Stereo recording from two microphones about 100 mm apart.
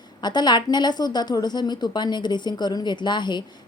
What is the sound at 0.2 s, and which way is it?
A woman's voice, 45° left (ahead or behind).